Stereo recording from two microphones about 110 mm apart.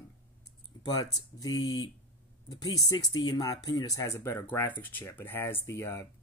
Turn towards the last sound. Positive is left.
turn(degrees=25)  # may be behind; listen again after turning